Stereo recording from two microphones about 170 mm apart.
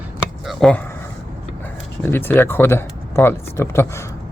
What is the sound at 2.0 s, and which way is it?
Speech, 15° left (ahead or behind).